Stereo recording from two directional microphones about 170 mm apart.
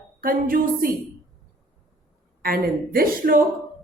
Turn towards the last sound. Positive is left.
turn(degrees=-55)  # may be behind; listen again after turning